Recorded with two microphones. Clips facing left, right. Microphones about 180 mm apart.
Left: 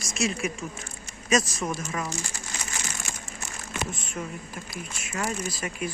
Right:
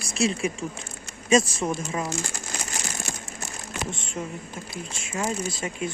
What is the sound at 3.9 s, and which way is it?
Speech, 25° right (ahead or behind).